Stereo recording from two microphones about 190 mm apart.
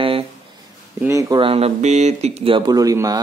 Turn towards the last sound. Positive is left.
turn(degrees=-20)  # may be behind; listen again after turning